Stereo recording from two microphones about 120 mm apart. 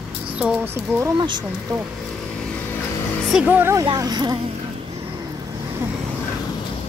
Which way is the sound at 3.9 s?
35° right (ahead or behind).